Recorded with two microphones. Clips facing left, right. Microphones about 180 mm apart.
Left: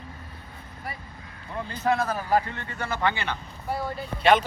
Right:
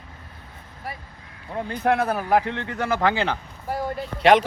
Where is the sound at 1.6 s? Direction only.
60° right (ahead or behind).